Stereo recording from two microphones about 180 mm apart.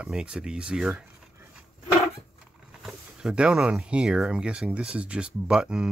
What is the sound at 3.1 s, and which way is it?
Speech, 5° right (ahead or behind).